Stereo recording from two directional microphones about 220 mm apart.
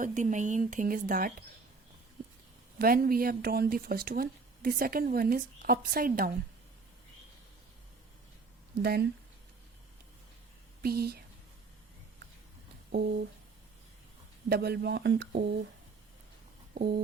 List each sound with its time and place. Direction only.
0.0 s speech: 35° right (ahead or behind)
2.7 s speech: 40° right (ahead or behind)
8.8 s speech: 45° right (ahead or behind)
10.8 s speech: 45° right (ahead or behind)
14.5 s speech: 50° right (ahead or behind)
16.7 s a sound: 45° right (ahead or behind)